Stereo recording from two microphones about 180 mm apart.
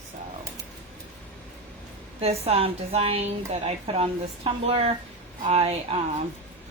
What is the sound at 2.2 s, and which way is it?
A woman's voice, 35° right (ahead or behind).